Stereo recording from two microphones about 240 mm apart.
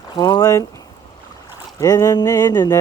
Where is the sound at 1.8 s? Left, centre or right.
Centre.